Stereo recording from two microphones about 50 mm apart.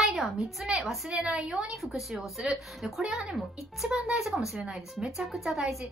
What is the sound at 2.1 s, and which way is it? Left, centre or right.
Speech, centre.